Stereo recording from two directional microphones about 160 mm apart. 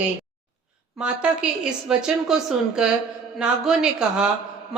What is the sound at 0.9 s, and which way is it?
A woman's voice, 5° right (ahead or behind).